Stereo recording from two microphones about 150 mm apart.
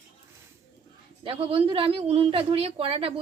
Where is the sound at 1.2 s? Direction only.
40° right (ahead or behind).